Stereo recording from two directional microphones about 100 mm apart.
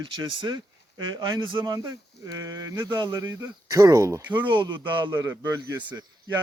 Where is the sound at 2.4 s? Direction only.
35° right (ahead or behind).